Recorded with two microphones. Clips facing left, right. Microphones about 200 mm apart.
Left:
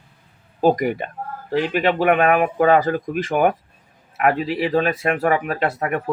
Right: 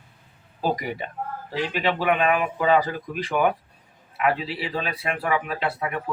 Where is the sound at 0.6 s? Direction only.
50° left (ahead or behind).